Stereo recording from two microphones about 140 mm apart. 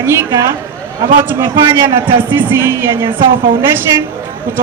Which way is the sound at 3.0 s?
35° right (ahead or behind).